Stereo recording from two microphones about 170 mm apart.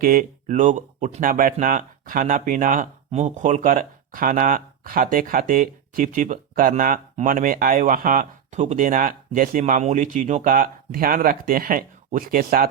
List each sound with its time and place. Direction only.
0.0 s speech: 55° right (ahead or behind)